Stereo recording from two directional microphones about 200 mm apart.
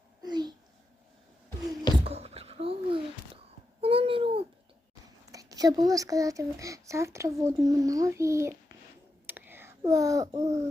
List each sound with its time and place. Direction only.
0.2 s a sound: 20° right (ahead or behind)
2.0 s a sound: 30° right (ahead or behind)
3.8 s babbling: 30° right (ahead or behind)
5.3 s speech: 15° right (ahead or behind)
9.2 s whispering: 10° right (ahead or behind)
10.3 s speech: 35° right (ahead or behind)